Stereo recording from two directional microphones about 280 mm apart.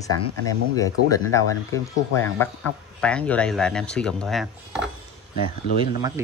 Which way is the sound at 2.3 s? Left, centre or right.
Centre.